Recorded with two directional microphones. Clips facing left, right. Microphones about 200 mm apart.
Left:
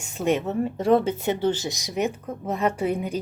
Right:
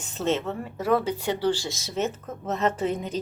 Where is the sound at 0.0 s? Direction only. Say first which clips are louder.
Left 2 dB; 10° left (ahead or behind).